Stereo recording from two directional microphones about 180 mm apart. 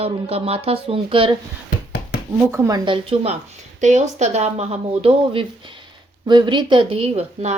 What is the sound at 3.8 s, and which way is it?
Speech, 40° right (ahead or behind).